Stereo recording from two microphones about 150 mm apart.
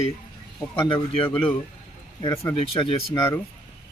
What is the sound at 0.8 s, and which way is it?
Speech, 35° left (ahead or behind).